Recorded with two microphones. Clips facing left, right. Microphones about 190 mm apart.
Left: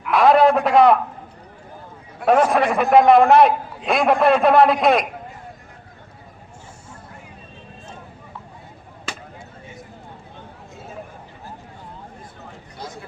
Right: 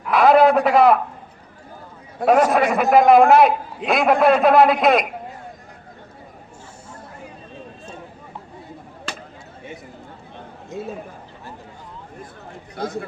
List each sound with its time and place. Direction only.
0.1 s a man's voice: centre (ahead or behind)
2.2 s a man's voice: centre (ahead or behind)
12.7 s a sound: 55° right (ahead or behind)